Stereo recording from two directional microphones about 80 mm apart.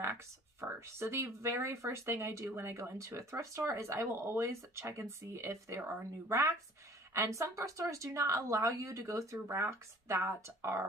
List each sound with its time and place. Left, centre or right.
0.7 s speech: right